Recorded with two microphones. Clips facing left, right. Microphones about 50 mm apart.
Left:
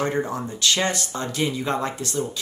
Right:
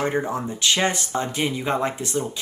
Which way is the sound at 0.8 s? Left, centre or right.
Right.